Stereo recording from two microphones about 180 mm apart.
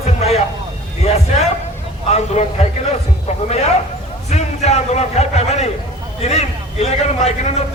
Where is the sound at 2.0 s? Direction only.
35° left (ahead or behind).